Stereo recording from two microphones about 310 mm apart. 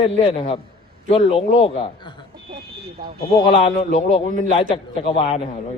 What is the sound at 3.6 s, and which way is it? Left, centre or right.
A man's voice, left.